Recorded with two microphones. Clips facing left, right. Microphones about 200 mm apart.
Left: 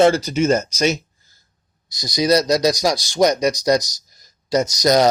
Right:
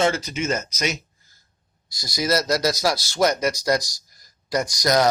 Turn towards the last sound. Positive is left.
turn(degrees=20)  # may be behind; listen again after turning